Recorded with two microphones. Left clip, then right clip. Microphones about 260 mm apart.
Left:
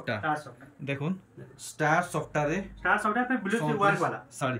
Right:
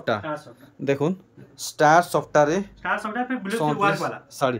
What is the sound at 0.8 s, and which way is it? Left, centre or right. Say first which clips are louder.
Speech: right 11 dB; right.